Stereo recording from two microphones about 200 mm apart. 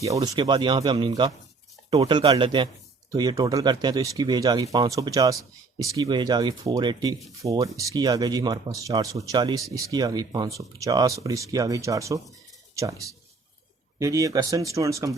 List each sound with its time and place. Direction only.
0.2 s speech: 25° right (ahead or behind)
14.0 s speech: 15° right (ahead or behind)